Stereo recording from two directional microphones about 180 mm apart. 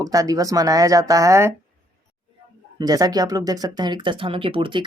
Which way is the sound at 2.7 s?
20° right (ahead or behind).